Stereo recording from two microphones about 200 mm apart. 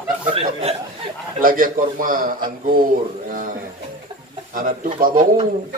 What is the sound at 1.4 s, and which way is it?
Speech, 45° right (ahead or behind).